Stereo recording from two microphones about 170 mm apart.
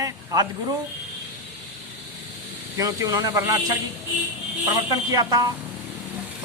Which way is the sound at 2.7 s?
20° right (ahead or behind).